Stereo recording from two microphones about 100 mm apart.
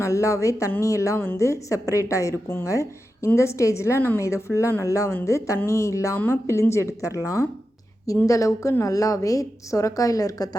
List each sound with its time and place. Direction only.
0.0 s a woman's voice: 30° left (ahead or behind)